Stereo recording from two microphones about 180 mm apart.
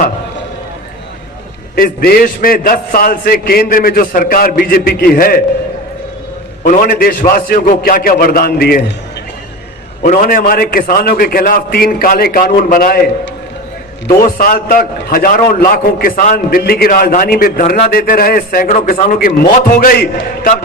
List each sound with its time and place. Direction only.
1.7 s a man's voice: 55° left (ahead or behind)
6.7 s a man's voice: 55° left (ahead or behind)
10.0 s a man's voice: 50° left (ahead or behind)
14.2 s a man's voice: 55° left (ahead or behind)